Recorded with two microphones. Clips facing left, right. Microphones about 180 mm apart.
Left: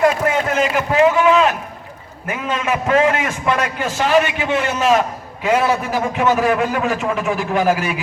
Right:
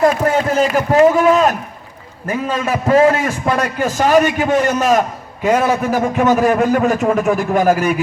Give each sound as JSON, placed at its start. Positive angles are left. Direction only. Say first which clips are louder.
{"t": 0.5, "sound": "a man's voice", "louder": "right 4 dB", "side_deg": -35}